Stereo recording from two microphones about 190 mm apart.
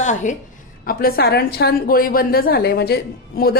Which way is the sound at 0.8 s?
50° left (ahead or behind).